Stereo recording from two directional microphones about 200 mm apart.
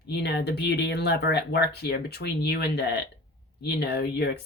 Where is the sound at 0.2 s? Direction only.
55° left (ahead or behind).